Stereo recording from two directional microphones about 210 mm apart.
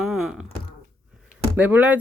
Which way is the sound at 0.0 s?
Centre (ahead or behind).